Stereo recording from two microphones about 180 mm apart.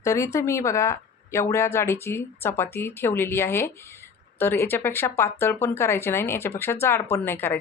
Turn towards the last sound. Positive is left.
turn(degrees=10)  # may be behind; listen again after turning